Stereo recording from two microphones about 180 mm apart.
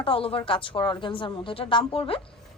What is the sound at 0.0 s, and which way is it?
A woman's voice, 30° left (ahead or behind).